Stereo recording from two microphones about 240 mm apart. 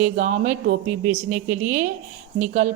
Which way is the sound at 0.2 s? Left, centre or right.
Right.